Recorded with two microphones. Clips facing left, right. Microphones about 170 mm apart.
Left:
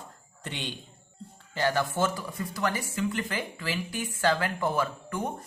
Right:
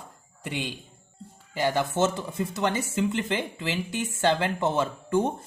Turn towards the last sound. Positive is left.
turn(degrees=-25)  # may be behind; listen again after turning